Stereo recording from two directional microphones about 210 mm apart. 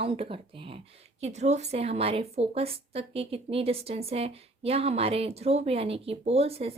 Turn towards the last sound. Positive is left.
turn(degrees=-30)  # may be behind; listen again after turning